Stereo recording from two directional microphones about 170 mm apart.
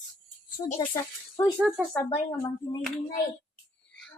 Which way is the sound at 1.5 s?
5° right (ahead or behind).